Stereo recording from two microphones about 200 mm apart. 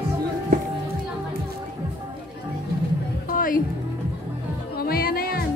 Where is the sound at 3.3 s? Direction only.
45° left (ahead or behind).